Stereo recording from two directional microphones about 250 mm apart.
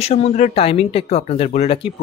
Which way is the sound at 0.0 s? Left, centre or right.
Left.